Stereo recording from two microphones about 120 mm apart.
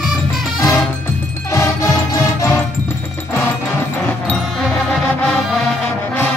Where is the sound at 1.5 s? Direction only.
25° left (ahead or behind).